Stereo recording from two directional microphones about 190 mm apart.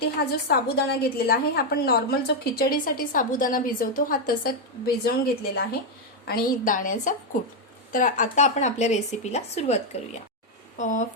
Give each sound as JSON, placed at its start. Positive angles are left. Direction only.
{"t": 0.0, "sound": "a woman's voice", "side_deg": 55}